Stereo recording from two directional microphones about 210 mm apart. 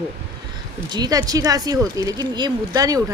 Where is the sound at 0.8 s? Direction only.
20° right (ahead or behind).